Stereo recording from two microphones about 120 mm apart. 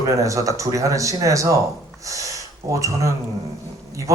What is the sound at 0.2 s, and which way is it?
A man's voice, 25° right (ahead or behind).